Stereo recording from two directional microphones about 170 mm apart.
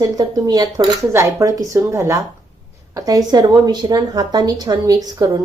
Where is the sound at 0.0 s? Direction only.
20° right (ahead or behind).